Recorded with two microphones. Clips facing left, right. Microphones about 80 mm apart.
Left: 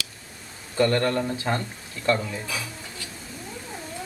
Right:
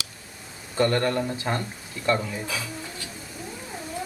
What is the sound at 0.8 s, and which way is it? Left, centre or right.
Speech, right.